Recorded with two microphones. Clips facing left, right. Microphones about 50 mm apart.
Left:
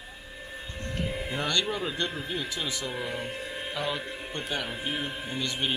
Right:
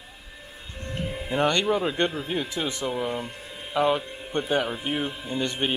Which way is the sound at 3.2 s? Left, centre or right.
Left.